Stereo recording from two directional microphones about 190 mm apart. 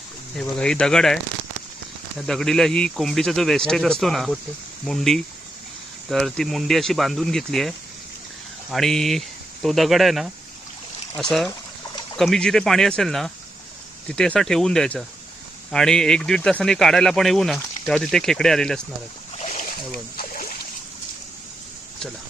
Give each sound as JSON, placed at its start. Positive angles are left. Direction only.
{"t": 0.3, "sound": "speech", "side_deg": 5}
{"t": 8.7, "sound": "speech", "side_deg": 0}
{"t": 20.1, "sound": "splash", "side_deg": 50}